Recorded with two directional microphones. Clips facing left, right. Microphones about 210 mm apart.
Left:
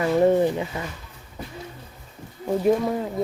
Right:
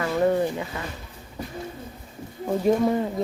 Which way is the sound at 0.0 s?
20° left (ahead or behind).